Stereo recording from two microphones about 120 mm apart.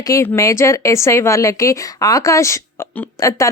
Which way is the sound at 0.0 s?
25° left (ahead or behind).